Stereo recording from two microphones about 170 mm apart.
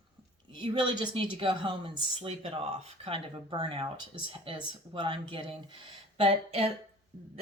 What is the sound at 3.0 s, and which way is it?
A woman's voice, 30° right (ahead or behind).